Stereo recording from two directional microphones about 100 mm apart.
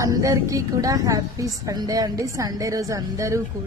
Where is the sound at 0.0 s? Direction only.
30° right (ahead or behind).